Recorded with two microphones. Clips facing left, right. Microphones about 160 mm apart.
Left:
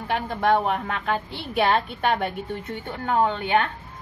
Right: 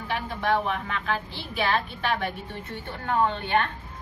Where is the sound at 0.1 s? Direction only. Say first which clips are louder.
Left 4 dB; 55° left (ahead or behind).